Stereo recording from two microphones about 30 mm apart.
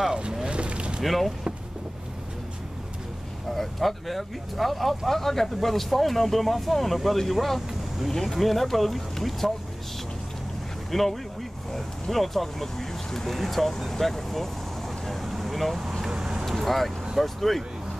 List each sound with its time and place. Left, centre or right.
0.5 s a sound: right
1.0 s speech: centre
3.5 s speech: centre
8.1 s speech: centre
8.4 s speech: centre
10.9 s speech: centre
15.2 s vehicle: centre
16.1 s vehicle: right
16.4 s vehicle: centre
17.2 s speech: centre